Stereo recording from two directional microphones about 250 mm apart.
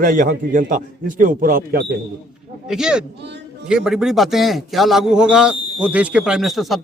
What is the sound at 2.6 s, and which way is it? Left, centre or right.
A man's voice, centre.